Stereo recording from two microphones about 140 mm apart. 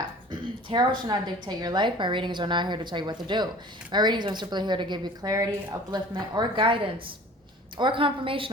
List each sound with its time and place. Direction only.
0.3 s a woman's voice: 35° right (ahead or behind)